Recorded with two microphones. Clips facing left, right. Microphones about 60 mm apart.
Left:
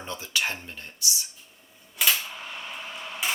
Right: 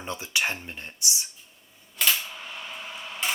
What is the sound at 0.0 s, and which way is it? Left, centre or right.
Speech, right.